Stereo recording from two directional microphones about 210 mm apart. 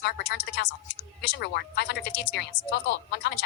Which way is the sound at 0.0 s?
50° left (ahead or behind).